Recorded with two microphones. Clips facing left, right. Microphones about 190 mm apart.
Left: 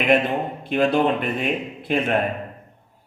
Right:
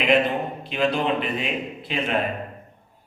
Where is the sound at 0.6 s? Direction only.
50° left (ahead or behind).